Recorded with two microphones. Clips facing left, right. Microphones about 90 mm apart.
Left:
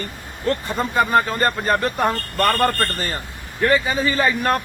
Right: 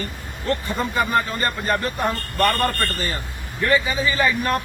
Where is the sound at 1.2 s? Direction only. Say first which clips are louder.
Left 4 dB; 45° left (ahead or behind).